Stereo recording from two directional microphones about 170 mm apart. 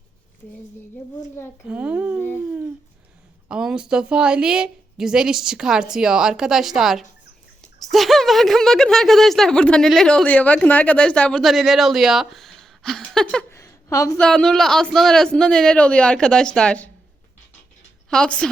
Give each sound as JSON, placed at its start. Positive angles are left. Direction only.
{"t": 1.6, "sound": "a child's voice", "side_deg": -10}
{"t": 2.4, "sound": "a sound", "side_deg": -10}
{"t": 3.5, "sound": "speech", "side_deg": -5}
{"t": 13.5, "sound": "a sound", "side_deg": 15}
{"t": 14.2, "sound": "speech", "side_deg": 5}
{"t": 18.1, "sound": "speech", "side_deg": 5}